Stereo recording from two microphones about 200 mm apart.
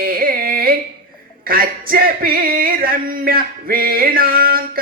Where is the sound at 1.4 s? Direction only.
45° right (ahead or behind).